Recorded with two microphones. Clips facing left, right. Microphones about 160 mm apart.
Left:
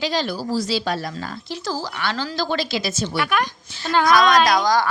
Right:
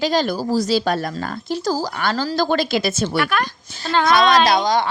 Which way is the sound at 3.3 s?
15° left (ahead or behind).